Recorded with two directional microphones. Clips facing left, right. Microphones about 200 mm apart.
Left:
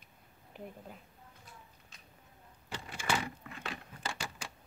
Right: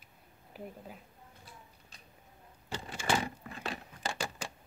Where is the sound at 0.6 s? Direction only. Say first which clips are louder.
Right 2 dB; 5° right (ahead or behind).